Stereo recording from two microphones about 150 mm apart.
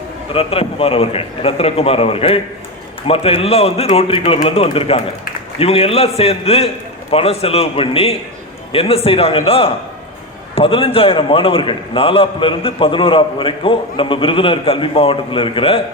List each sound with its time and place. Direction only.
0.3 s a man's voice: 40° left (ahead or behind)